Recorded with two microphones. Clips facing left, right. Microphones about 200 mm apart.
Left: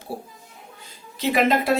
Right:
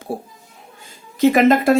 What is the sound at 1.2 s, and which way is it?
Speech, 50° right (ahead or behind).